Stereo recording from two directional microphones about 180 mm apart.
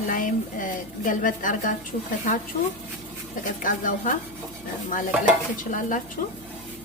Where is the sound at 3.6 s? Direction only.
50° left (ahead or behind).